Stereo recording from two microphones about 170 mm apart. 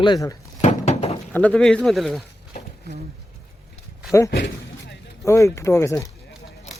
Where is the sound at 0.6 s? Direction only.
35° left (ahead or behind).